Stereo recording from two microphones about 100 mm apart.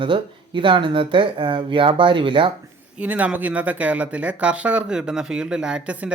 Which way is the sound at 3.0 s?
15° right (ahead or behind).